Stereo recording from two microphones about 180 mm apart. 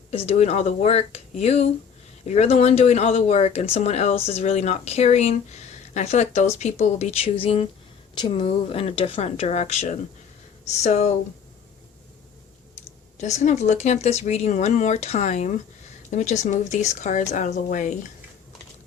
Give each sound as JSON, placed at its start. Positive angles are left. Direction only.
{"t": 0.1, "sound": "speech", "side_deg": 35}
{"t": 13.1, "sound": "a woman's voice", "side_deg": 40}